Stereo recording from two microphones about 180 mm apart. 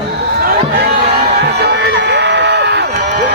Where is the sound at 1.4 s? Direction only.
70° right (ahead or behind).